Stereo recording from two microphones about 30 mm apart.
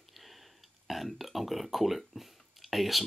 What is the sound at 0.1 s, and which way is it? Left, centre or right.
Speech, centre.